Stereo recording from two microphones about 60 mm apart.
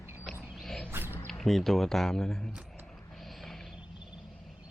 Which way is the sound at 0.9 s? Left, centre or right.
Right.